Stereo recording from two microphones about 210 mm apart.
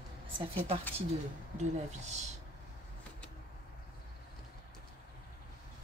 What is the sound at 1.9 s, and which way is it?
Speech, 35° right (ahead or behind).